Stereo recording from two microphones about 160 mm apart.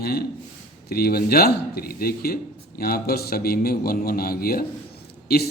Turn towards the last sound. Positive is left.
turn(degrees=75)  # may be behind; listen again after turning